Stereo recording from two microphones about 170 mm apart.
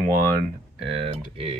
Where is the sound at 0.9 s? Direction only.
35° right (ahead or behind).